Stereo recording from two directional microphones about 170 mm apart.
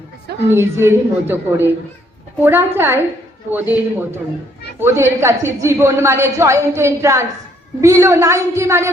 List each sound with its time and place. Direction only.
0.4 s a woman's voice: 15° right (ahead or behind)